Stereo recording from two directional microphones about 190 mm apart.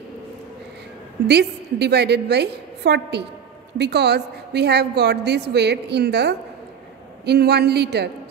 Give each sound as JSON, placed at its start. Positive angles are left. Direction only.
{"t": 1.2, "sound": "a woman's voice", "side_deg": -60}